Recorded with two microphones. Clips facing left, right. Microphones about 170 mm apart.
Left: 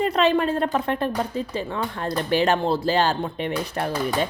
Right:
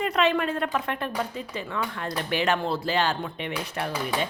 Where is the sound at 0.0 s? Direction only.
35° left (ahead or behind).